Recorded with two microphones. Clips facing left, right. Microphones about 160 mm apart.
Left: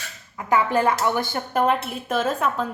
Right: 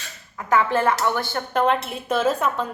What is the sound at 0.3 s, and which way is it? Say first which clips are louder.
Speech: even; 15° left (ahead or behind).